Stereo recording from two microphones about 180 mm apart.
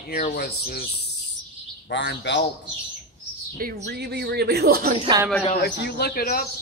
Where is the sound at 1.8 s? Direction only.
70° left (ahead or behind).